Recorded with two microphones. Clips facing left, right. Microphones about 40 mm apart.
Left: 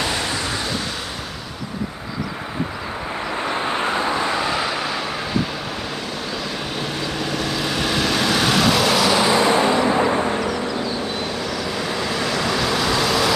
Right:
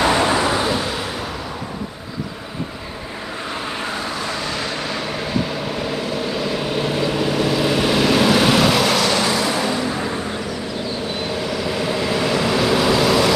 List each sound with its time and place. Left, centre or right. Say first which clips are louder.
0.0 s a sound: right 7 dB; right
0.5 s waves: right 6 dB; centre
3.8 s vehicle: left 4 dB; left; by 5.0 s centre
6.2 s vehicle: right 4 dB; centre
9.3 s vehicle: left 4 dB; left
11.3 s vehicle: right 2 dB; centre